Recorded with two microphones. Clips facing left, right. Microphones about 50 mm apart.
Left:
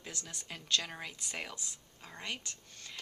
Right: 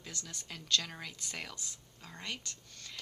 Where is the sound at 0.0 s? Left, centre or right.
Left.